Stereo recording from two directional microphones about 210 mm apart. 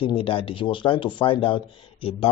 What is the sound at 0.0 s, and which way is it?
Speech, 25° left (ahead or behind).